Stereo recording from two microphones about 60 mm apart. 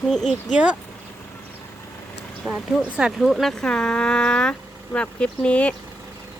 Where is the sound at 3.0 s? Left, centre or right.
Centre.